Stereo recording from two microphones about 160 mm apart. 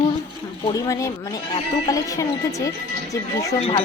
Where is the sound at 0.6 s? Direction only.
20° left (ahead or behind).